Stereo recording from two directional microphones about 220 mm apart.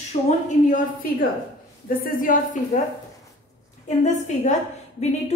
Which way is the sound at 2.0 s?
40° left (ahead or behind).